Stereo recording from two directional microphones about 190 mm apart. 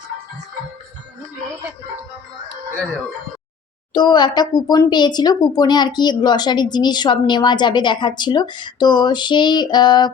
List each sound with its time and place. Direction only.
3.9 s speech: 25° left (ahead or behind)